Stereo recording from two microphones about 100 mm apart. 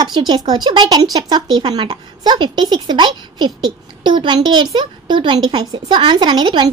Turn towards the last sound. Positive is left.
turn(degrees=-50)  # may be behind; listen again after turning